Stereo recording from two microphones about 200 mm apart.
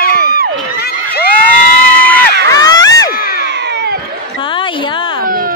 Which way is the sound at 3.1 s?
45° left (ahead or behind).